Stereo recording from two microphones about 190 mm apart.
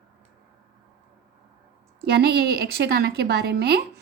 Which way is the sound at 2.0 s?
60° right (ahead or behind).